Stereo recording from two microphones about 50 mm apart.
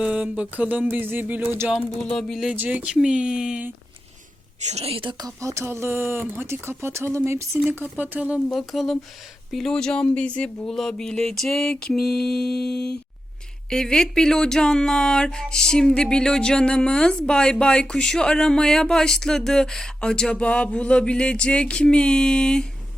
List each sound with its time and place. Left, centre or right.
0.0 s a sound: centre
0.5 s speech: right
0.9 s speech: right
2.0 s speech: centre
2.6 s speech: right
5.4 s a sound: right
7.3 s speech: right
7.7 s speech: right
8.5 s speech: centre
9.6 s speech: centre
10.7 s speech: centre
11.7 s speech: left
11.9 s speech: centre